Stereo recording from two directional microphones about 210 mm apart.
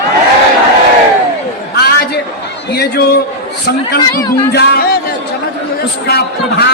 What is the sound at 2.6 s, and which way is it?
A man's voice, 50° left (ahead or behind).